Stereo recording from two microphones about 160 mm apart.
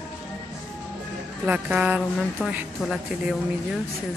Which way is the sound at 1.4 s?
10° right (ahead or behind).